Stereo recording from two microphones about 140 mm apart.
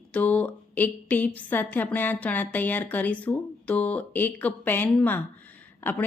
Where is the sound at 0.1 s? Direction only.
10° left (ahead or behind).